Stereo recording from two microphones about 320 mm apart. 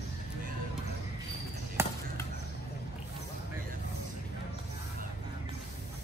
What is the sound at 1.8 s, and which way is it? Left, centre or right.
Basketball bounce, centre.